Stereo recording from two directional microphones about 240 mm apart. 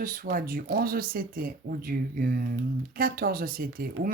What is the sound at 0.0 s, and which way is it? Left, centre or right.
Speech, right.